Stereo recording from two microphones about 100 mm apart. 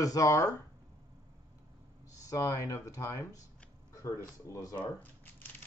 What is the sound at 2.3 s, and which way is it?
Speech, 30° left (ahead or behind).